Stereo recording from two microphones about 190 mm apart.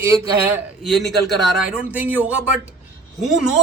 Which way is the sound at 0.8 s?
Centre (ahead or behind).